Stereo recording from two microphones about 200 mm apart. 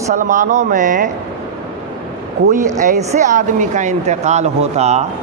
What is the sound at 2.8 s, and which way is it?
Speech, 35° right (ahead or behind).